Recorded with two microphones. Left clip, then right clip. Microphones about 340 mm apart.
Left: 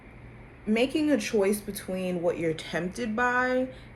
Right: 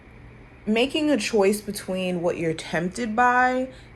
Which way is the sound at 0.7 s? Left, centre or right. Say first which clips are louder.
Right 3 dB; right.